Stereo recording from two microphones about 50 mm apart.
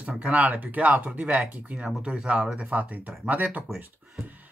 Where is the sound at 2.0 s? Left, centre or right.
Centre.